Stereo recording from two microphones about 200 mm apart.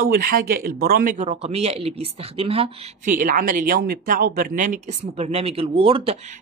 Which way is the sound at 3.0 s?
40° right (ahead or behind).